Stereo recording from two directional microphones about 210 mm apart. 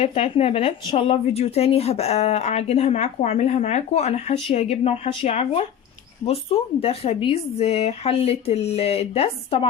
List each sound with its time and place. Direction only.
0.0 s a woman's voice: 25° left (ahead or behind)